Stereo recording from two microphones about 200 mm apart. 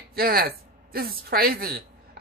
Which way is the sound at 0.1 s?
50° right (ahead or behind).